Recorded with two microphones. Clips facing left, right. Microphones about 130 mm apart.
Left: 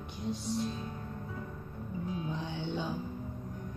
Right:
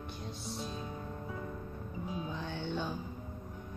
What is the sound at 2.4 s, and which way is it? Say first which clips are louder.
Music: left 1 dB; 15° left (ahead or behind).